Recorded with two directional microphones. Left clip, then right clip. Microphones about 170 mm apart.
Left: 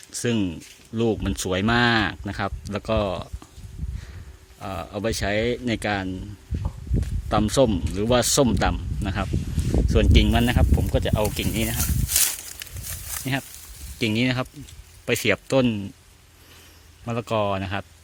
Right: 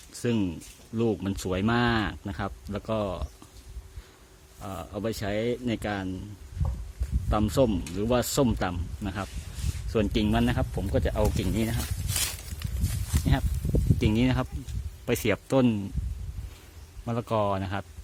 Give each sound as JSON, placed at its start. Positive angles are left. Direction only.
{"t": 0.1, "sound": "speech", "side_deg": 5}
{"t": 4.6, "sound": "speech", "side_deg": 10}
{"t": 7.3, "sound": "speech", "side_deg": 10}
{"t": 12.0, "sound": "a sound", "side_deg": 70}
{"t": 14.0, "sound": "speech", "side_deg": 0}
{"t": 17.1, "sound": "speech", "side_deg": 0}